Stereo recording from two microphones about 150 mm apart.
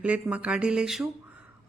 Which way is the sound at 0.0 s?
10° right (ahead or behind).